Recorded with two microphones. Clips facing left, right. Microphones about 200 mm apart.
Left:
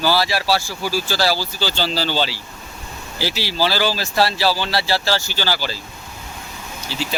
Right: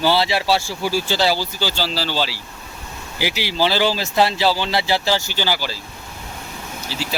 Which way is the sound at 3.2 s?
15° right (ahead or behind).